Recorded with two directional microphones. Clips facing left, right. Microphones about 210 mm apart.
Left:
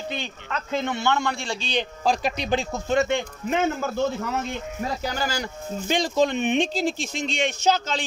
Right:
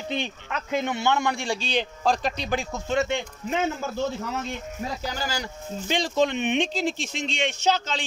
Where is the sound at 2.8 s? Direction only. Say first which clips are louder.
Left 3 dB; 50° left (ahead or behind).